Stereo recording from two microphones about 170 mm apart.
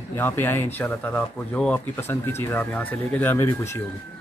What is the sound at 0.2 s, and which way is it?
Speech, 10° left (ahead or behind).